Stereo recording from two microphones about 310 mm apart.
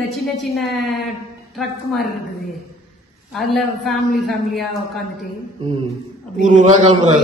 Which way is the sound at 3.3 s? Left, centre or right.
Centre.